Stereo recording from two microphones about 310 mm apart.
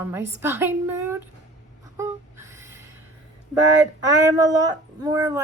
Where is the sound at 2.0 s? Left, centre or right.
Centre.